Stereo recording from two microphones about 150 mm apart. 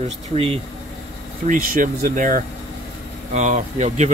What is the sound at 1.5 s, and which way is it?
Speech, 70° right (ahead or behind).